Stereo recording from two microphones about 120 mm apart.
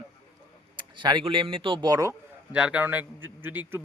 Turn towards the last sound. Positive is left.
turn(degrees=-20)  # may be behind; listen again after turning